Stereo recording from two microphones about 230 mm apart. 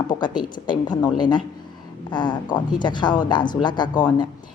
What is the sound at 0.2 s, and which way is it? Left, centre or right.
Speech, centre.